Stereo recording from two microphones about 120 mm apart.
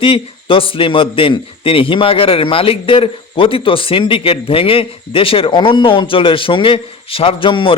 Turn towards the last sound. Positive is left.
turn(degrees=45)  # may be behind; listen again after turning